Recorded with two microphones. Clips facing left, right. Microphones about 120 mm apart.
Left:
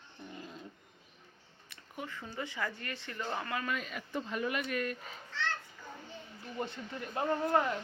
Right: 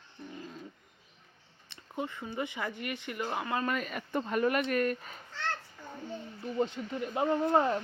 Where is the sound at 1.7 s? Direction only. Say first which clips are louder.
Right 6 dB; 25° right (ahead or behind).